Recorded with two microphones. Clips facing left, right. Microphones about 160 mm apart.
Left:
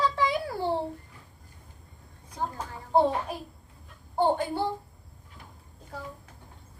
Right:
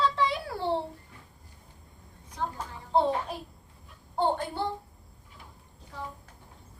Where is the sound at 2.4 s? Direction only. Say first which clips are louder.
Left 1 dB; 10° left (ahead or behind).